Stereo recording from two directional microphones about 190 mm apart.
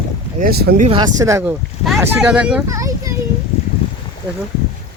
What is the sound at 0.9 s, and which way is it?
Speech, 20° right (ahead or behind).